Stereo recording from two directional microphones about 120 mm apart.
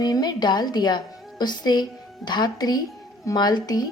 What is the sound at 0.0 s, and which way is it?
A woman's voice, 35° left (ahead or behind).